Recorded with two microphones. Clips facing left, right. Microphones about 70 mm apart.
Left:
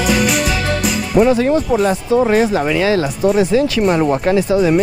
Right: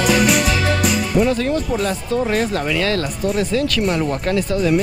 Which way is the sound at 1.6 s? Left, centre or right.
Centre.